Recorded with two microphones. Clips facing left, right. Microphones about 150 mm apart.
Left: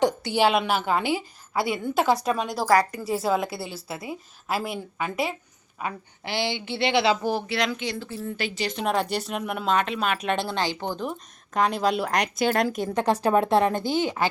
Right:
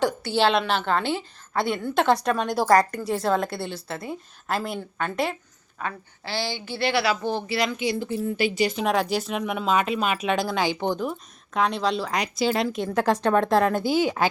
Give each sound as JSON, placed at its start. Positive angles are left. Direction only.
{"t": 0.0, "sound": "a woman's voice", "side_deg": 15}
{"t": 5.8, "sound": "a woman's voice", "side_deg": 20}
{"t": 7.2, "sound": "a woman's voice", "side_deg": 5}
{"t": 11.5, "sound": "a woman's voice", "side_deg": 0}
{"t": 12.4, "sound": "speech", "side_deg": 50}
{"t": 12.6, "sound": "a woman's voice", "side_deg": 0}